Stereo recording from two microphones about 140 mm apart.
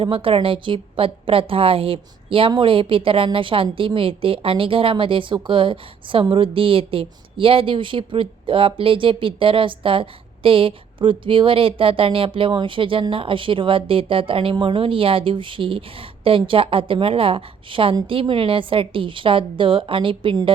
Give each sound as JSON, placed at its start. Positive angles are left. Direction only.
{"t": 0.0, "sound": "a woman's voice", "side_deg": -40}